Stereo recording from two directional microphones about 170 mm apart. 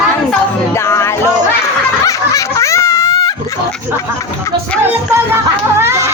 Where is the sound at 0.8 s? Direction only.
15° left (ahead or behind).